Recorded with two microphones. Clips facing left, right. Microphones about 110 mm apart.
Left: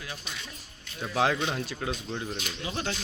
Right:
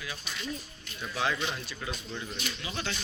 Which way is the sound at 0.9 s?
75° left (ahead or behind).